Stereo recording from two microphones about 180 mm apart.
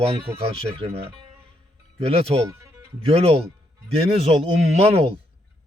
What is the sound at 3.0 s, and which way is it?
Speech, 35° right (ahead or behind).